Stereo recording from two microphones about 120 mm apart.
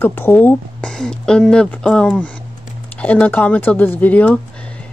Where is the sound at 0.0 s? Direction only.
15° left (ahead or behind).